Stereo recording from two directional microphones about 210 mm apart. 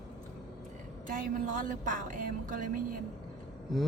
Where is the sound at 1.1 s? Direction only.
40° right (ahead or behind).